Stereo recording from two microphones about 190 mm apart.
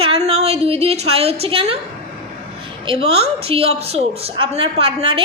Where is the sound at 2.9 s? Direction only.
30° right (ahead or behind).